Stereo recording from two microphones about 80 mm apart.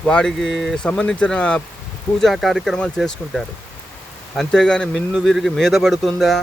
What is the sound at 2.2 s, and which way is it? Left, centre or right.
Speech, centre.